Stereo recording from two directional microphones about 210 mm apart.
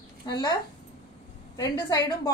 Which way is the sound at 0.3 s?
20° left (ahead or behind).